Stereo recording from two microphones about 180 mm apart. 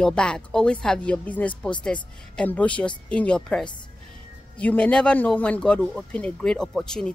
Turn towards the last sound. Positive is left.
turn(degrees=5)  # may be behind; listen again after turning